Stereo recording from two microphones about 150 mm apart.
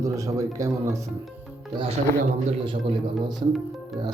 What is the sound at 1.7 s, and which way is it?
A man's voice, 35° right (ahead or behind).